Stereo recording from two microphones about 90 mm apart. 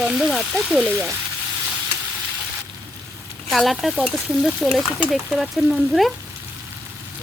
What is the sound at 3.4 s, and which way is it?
Speech, centre (ahead or behind).